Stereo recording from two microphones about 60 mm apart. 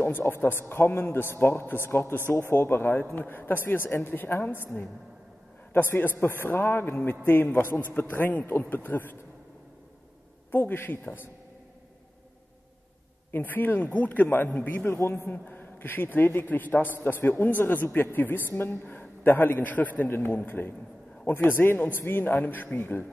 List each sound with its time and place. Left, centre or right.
0.0 s a man's voice: left
5.7 s a man's voice: left
10.5 s a man's voice: left
13.3 s a man's voice: left
15.0 s a man's voice: left